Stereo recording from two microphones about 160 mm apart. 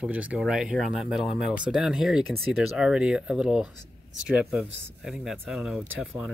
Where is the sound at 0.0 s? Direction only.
5° right (ahead or behind).